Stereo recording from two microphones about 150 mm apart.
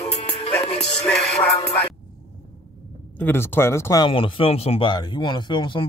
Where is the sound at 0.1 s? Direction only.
40° left (ahead or behind).